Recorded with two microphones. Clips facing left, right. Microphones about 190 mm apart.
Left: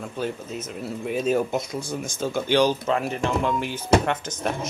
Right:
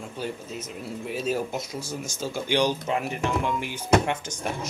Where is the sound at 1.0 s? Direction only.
55° left (ahead or behind).